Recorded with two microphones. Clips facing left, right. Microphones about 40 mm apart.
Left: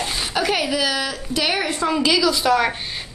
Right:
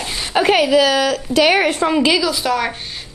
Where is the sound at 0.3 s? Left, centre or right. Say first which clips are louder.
Right 9 dB; right.